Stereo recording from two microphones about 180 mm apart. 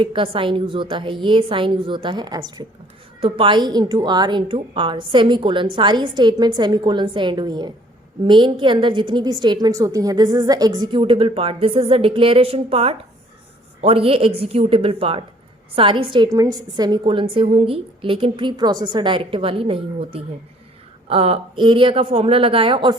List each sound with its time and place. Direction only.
0.0 s a woman's voice: 30° right (ahead or behind)